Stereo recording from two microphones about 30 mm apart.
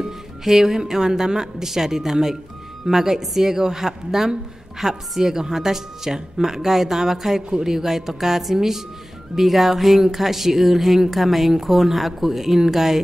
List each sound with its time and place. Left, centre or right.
0.0 s a woman's voice: centre